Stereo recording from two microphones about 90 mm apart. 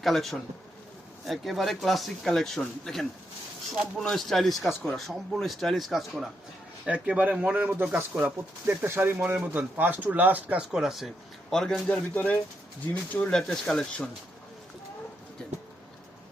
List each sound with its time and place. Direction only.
0.0 s a man's voice: centre (ahead or behind)
6.8 s speech: 10° right (ahead or behind); by 14.1 s 10° left (ahead or behind)
15.4 s a sound: 10° left (ahead or behind)